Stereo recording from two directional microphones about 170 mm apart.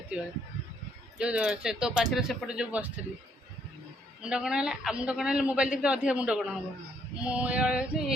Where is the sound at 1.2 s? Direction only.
5° right (ahead or behind).